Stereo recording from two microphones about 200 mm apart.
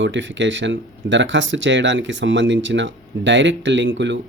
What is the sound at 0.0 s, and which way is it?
Speech, 65° right (ahead or behind).